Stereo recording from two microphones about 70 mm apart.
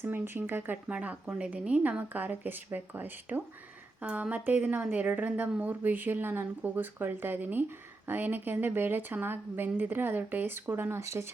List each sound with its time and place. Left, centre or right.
0.0 s a woman's voice: right